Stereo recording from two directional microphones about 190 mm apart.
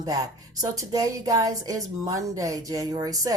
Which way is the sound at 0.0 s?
20° right (ahead or behind).